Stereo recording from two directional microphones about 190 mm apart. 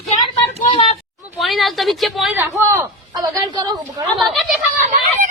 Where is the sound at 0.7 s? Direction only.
30° left (ahead or behind).